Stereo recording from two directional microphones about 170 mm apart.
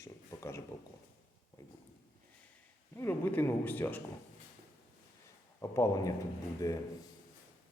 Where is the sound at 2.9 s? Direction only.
10° left (ahead or behind).